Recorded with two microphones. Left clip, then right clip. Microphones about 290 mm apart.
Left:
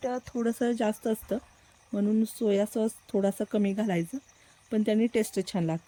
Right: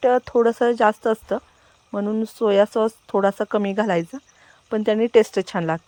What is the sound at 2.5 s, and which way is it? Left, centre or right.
Speech, right.